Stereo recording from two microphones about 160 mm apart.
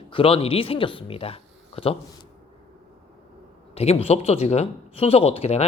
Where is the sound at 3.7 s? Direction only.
40° left (ahead or behind).